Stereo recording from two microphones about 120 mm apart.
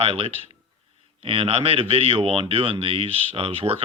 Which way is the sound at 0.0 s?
55° right (ahead or behind).